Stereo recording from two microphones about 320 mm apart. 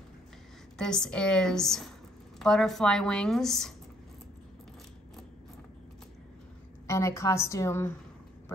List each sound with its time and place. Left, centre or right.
0.7 s a woman's voice: centre
6.9 s a woman's voice: centre